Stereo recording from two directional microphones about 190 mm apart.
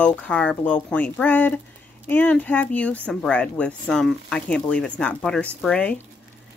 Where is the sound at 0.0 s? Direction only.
5° left (ahead or behind).